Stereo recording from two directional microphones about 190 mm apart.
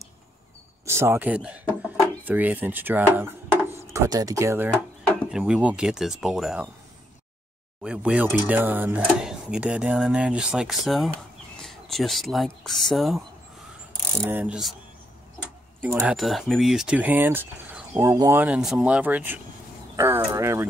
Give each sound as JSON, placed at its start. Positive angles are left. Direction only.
{"t": 0.8, "sound": "speech", "side_deg": -15}
{"t": 7.8, "sound": "speech", "side_deg": -5}
{"t": 14.2, "sound": "speech", "side_deg": -10}
{"t": 15.8, "sound": "speech", "side_deg": -10}